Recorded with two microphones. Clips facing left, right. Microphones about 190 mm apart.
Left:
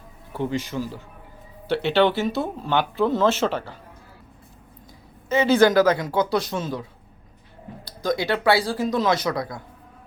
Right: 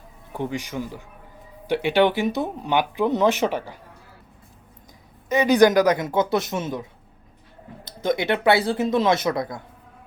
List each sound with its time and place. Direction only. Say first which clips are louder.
0.3 s speech: left 2 dB; 15° right (ahead or behind)
5.3 s speech: right 1 dB; 15° right (ahead or behind)
7.9 s speech: right 1 dB; 20° right (ahead or behind)